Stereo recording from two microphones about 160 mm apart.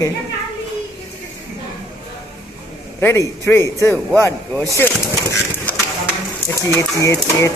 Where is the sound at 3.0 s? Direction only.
15° left (ahead or behind).